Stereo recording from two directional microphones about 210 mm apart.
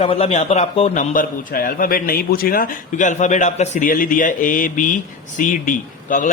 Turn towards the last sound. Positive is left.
turn(degrees=40)  # may be behind; listen again after turning